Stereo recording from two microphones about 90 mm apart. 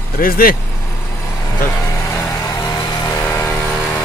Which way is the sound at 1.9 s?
35° left (ahead or behind).